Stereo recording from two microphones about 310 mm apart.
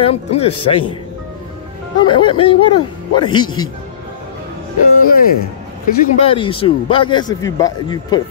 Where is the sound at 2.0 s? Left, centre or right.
Centre.